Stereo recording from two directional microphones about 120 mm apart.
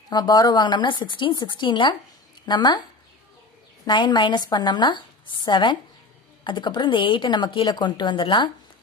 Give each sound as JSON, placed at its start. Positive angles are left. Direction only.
{"t": 0.1, "sound": "speech", "side_deg": 35}
{"t": 3.8, "sound": "speech", "side_deg": 40}